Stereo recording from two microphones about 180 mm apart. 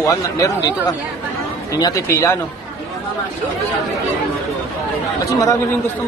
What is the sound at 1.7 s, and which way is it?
Speech, 20° left (ahead or behind).